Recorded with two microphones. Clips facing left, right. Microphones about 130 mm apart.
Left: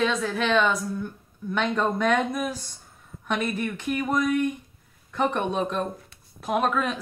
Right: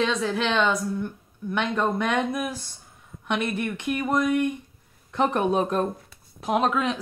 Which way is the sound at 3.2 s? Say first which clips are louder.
Right 1 dB; 15° right (ahead or behind).